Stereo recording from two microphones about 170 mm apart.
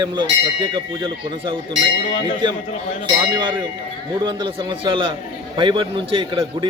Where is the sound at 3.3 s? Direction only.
25° right (ahead or behind).